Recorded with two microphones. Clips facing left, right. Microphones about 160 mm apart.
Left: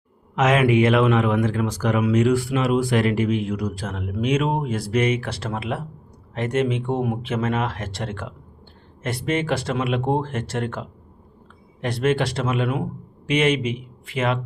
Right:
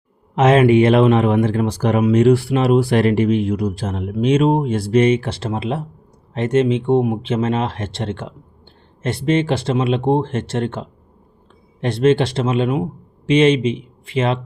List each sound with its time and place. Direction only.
0.3 s speech: 30° right (ahead or behind)